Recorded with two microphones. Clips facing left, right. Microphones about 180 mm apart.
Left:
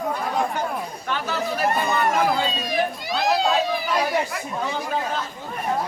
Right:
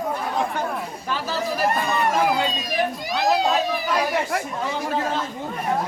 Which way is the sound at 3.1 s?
20° right (ahead or behind).